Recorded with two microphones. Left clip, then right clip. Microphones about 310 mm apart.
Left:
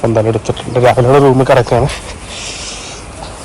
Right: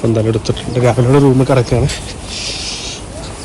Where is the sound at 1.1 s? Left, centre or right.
Left.